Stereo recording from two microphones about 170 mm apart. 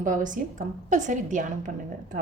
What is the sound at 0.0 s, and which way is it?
A woman's voice, 50° right (ahead or behind).